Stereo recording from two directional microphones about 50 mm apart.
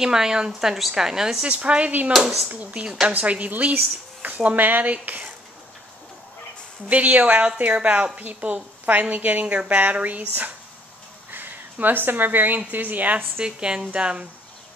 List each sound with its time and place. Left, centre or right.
0.0 s speech: centre
1.5 s a woman's voice: right
2.1 s speech: centre
2.4 s a woman's voice: right
6.9 s a woman's voice: right
11.2 s a woman's voice: right
13.4 s a woman's voice: centre